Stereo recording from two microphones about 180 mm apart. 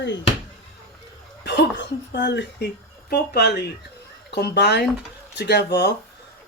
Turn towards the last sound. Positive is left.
turn(degrees=65)  # may be behind; listen again after turning